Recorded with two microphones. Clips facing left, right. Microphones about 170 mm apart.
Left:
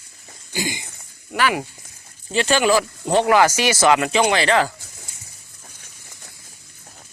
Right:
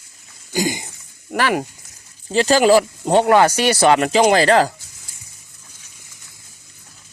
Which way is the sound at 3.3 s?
30° right (ahead or behind).